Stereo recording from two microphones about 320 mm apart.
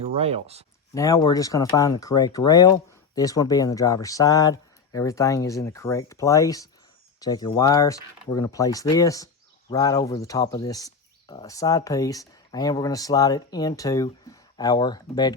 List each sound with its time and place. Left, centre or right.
0.2 s speech: centre
0.9 s speech: centre